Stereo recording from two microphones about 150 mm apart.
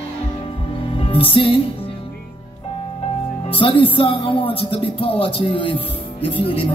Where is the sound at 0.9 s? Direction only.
35° left (ahead or behind).